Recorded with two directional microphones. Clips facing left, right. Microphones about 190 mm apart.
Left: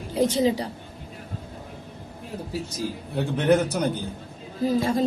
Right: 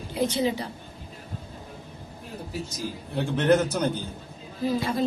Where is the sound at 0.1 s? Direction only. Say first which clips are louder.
Left 4 dB; 40° left (ahead or behind).